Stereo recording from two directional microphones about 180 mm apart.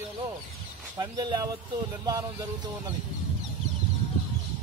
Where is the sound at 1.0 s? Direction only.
25° right (ahead or behind).